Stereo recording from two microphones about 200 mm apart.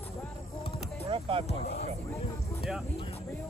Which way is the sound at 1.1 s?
25° right (ahead or behind).